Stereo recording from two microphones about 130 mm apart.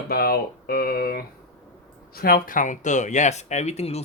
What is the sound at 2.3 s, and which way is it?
Speech, 90° left.